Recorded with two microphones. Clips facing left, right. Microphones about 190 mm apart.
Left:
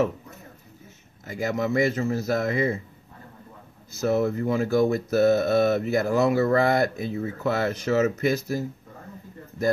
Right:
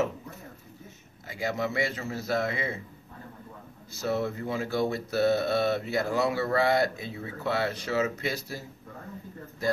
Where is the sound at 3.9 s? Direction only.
45° left (ahead or behind).